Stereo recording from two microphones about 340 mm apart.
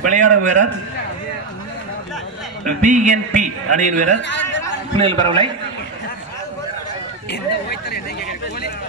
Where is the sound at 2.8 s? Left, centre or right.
Right.